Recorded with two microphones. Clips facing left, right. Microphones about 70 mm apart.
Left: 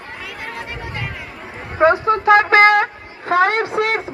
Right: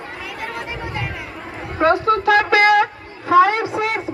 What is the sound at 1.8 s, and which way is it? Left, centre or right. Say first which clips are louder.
Music: left 1 dB; left.